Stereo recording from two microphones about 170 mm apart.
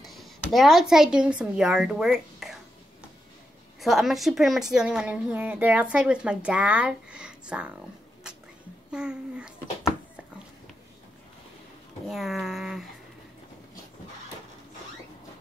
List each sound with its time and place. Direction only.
0.0 s speech: centre (ahead or behind)
3.8 s a woman's voice: centre (ahead or behind)
8.9 s a woman's voice: 5° right (ahead or behind)
12.1 s a woman's voice: centre (ahead or behind)